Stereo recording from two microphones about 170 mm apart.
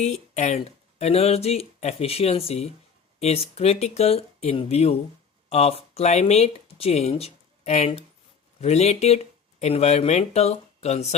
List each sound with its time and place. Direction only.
0.0 s speech: 40° left (ahead or behind)